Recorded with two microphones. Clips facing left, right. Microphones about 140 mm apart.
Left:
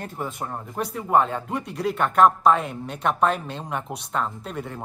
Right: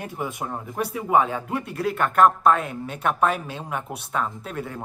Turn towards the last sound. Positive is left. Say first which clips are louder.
# right 1 dB
turn(degrees=0)  # may be behind; listen again after turning